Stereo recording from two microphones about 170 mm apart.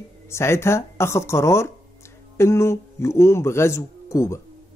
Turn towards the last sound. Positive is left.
turn(degrees=15)  # may be behind; listen again after turning